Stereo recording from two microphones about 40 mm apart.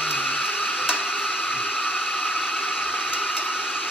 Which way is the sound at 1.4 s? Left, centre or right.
Left.